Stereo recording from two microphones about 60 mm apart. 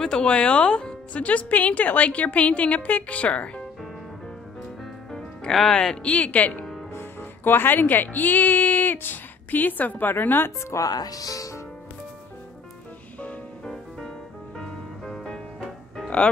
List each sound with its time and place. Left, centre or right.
0.0 s speech: centre
5.1 s music: centre
5.7 s speech: centre
6.9 s speech: left
10.7 s speech: left
14.6 s music: centre